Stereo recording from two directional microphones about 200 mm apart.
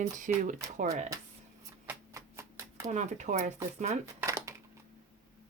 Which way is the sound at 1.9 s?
15° right (ahead or behind).